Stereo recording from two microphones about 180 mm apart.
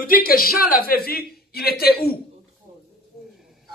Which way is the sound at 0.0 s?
55° left (ahead or behind).